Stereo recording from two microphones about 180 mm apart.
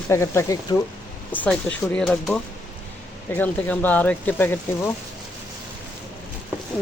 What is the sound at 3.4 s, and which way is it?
Speech, 10° left (ahead or behind).